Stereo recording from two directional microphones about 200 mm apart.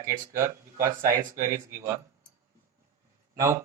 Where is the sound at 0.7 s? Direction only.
45° right (ahead or behind).